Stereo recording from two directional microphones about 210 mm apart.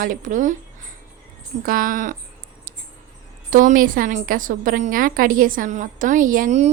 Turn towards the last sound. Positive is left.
turn(degrees=-35)  # may be behind; listen again after turning